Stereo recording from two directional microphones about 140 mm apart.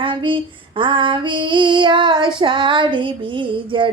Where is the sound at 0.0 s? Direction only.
35° right (ahead or behind).